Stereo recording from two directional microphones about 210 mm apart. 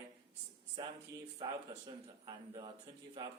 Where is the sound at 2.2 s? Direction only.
20° right (ahead or behind).